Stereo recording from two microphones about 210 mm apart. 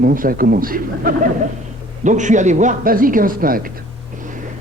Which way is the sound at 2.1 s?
35° right (ahead or behind).